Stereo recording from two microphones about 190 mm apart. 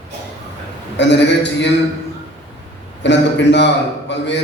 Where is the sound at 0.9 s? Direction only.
65° left (ahead or behind).